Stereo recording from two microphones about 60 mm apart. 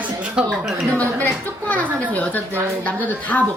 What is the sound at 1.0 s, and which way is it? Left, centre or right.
A woman's voice, left.